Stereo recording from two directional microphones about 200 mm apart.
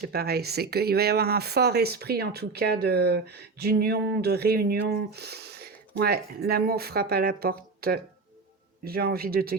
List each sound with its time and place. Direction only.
0.1 s speech: 50° right (ahead or behind)